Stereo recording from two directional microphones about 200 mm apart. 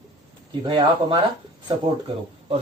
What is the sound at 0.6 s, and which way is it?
Speech, 25° right (ahead or behind).